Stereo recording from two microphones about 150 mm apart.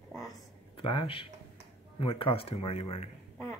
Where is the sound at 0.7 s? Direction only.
35° left (ahead or behind).